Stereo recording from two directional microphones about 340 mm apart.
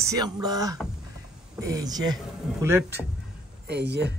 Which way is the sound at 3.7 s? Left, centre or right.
Right.